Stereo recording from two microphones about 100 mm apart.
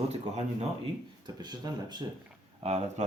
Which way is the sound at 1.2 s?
45° right (ahead or behind).